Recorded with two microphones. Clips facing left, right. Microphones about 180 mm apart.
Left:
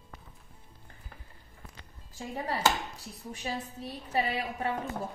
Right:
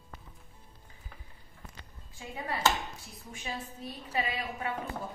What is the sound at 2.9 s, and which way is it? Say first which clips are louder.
Speech: left 4 dB; 35° left (ahead or behind).